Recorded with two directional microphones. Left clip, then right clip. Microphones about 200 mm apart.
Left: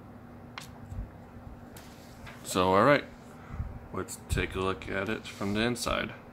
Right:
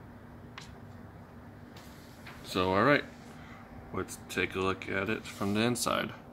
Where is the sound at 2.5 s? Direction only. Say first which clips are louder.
Left 3 dB; 15° left (ahead or behind).